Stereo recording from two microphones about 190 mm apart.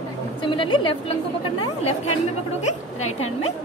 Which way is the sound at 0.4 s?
25° left (ahead or behind).